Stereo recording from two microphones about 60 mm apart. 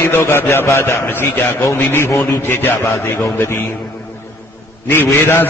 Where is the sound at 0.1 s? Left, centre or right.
Left.